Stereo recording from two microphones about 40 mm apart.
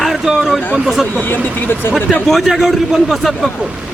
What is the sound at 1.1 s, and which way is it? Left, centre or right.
Speech, left.